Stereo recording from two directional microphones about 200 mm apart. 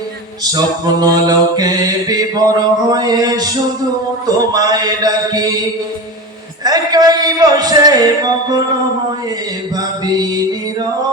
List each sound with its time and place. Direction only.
0.5 s mantra: 20° right (ahead or behind)
6.7 s music: 20° right (ahead or behind)
10.1 s mantra: 20° right (ahead or behind)